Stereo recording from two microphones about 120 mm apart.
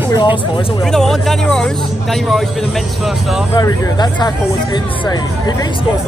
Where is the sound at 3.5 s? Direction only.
35° left (ahead or behind).